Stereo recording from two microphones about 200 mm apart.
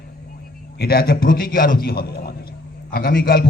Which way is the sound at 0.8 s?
50° left (ahead or behind).